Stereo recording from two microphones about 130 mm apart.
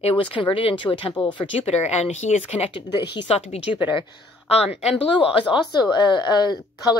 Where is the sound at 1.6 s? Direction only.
55° left (ahead or behind).